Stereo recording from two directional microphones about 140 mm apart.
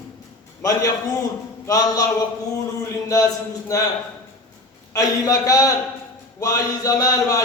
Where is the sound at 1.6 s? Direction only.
25° left (ahead or behind).